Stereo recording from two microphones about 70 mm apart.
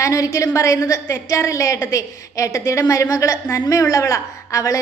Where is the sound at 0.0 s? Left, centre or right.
Left.